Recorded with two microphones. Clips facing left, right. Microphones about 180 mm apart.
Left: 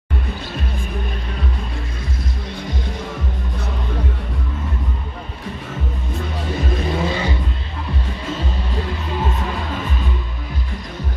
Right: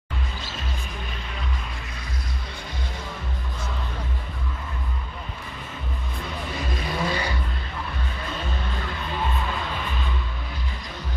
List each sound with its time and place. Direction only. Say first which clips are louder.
6.9 s vehicle: left 3 dB; 25° left (ahead or behind)